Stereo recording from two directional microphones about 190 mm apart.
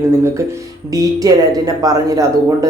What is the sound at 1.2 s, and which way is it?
Speech, 20° right (ahead or behind).